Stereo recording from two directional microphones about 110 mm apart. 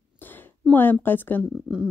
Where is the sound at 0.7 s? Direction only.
20° left (ahead or behind).